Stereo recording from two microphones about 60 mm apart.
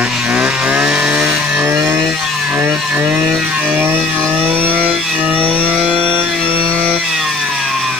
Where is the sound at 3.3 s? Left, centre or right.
Centre.